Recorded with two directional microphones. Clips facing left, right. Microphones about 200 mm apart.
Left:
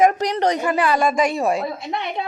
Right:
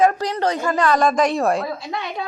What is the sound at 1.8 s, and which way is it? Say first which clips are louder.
Speech: left 2 dB; 25° left (ahead or behind).